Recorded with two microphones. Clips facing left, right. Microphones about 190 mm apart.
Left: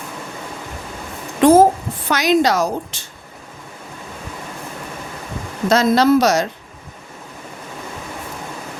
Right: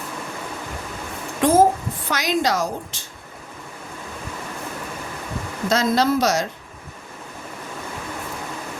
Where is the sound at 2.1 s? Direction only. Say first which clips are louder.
Left 6 dB; 70° left (ahead or behind).